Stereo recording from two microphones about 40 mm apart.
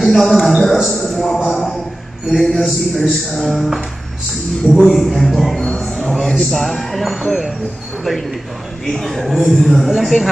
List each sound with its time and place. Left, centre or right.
0.0 s a man's voice: centre
4.8 s speech: centre
5.7 s a sound: centre
6.0 s speech: centre
8.8 s speech: centre